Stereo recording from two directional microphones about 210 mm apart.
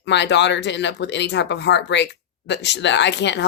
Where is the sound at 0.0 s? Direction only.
55° left (ahead or behind).